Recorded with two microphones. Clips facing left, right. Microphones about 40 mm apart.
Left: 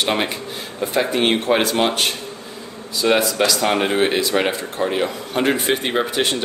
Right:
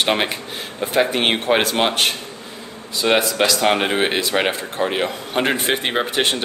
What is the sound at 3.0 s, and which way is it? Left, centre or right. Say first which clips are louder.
A man's voice: even; right.